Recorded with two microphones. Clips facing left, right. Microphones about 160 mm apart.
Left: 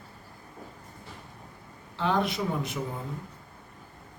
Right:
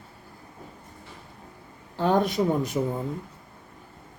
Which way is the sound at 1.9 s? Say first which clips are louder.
Right 5 dB; 45° right (ahead or behind).